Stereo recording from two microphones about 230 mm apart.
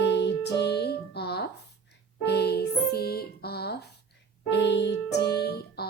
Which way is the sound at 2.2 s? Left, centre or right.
Left.